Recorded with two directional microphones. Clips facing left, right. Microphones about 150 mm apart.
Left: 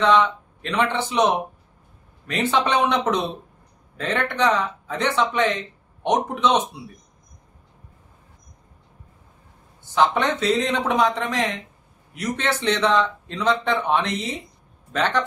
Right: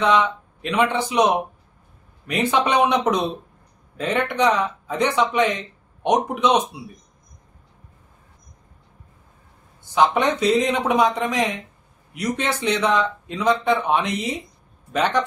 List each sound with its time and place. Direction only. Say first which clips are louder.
0.0 s speech: left 1 dB; 15° right (ahead or behind)
2.2 s speech: right 1 dB; 15° right (ahead or behind)
9.9 s speech: right 2 dB; 15° right (ahead or behind)